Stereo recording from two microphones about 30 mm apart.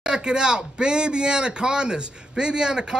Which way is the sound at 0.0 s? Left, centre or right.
Right.